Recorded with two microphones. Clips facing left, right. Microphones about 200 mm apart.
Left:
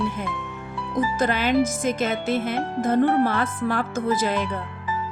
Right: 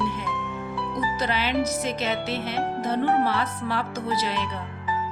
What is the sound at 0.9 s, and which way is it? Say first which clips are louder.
Speech: left 5 dB; 50° left (ahead or behind).